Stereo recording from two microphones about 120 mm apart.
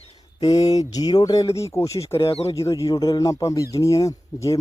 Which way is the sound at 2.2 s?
60° left (ahead or behind).